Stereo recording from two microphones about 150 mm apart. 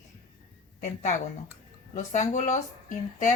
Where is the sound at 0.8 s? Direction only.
55° left (ahead or behind).